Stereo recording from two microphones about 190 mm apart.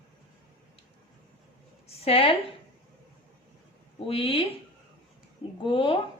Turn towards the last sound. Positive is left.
turn(degrees=25)  # may be behind; listen again after turning